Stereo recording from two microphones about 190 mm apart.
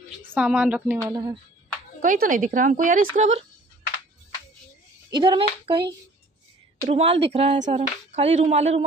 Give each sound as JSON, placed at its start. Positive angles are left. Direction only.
{"t": 0.2, "sound": "a woman's voice", "side_deg": -10}
{"t": 1.1, "sound": "speech", "side_deg": -20}
{"t": 2.0, "sound": "speech", "side_deg": -45}
{"t": 5.1, "sound": "speech", "side_deg": -25}
{"t": 6.9, "sound": "a sound", "side_deg": -30}